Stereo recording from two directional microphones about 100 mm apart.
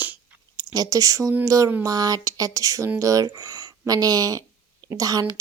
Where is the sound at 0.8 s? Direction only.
35° right (ahead or behind).